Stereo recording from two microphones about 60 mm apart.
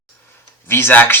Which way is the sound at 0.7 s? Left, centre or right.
Left.